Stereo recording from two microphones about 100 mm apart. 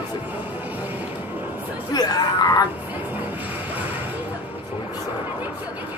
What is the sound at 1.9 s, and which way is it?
Speech, 40° left (ahead or behind).